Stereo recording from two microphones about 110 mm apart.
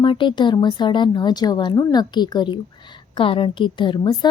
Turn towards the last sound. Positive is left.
turn(degrees=40)  # may be behind; listen again after turning